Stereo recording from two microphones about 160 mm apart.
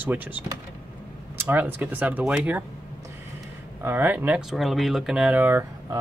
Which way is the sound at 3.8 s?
10° right (ahead or behind).